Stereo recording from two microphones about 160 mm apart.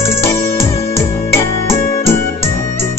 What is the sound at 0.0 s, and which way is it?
Music, 15° left (ahead or behind).